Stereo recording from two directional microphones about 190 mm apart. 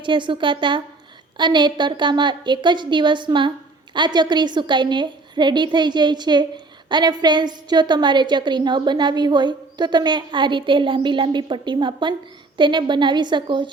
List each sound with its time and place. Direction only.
0.0 s a woman's voice: 25° right (ahead or behind)